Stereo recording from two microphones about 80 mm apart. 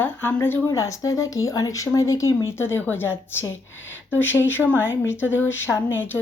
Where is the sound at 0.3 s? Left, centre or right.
Left.